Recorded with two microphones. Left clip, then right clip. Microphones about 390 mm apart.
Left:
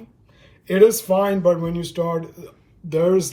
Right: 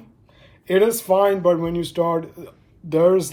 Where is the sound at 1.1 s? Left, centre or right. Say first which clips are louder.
Right 1 dB; right.